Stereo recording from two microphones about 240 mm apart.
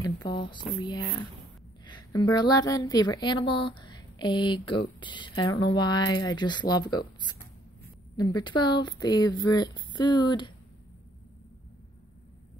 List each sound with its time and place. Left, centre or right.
0.0 s a woman's voice: centre